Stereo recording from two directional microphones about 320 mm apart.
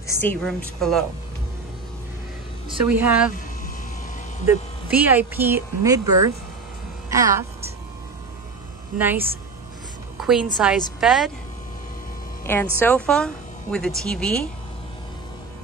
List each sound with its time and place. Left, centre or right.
0.2 s a woman's voice: centre
2.7 s a woman's voice: centre
4.5 s speech: centre
6.0 s speech: right
7.1 s speech: centre
8.9 s speech: centre
10.2 s a woman's voice: centre
12.4 s a woman's voice: centre